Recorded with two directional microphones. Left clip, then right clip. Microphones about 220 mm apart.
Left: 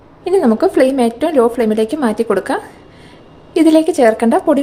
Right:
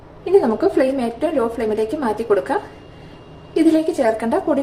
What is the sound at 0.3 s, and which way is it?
A woman's voice, 50° left (ahead or behind).